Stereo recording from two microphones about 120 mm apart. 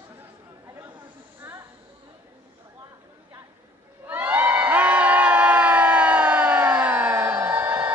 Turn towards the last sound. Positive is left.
turn(degrees=-15)  # may be behind; listen again after turning